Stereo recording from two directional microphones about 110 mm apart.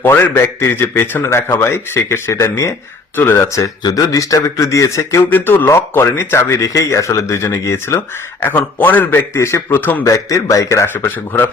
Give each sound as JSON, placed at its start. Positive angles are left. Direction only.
{"t": 0.0, "sound": "a man's voice", "side_deg": 20}
{"t": 10.1, "sound": "a man's voice", "side_deg": 30}